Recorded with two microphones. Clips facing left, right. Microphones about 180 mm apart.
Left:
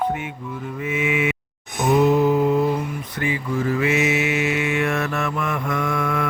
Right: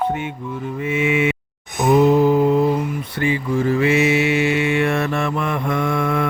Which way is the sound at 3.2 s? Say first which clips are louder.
Right 4 dB; 30° right (ahead or behind).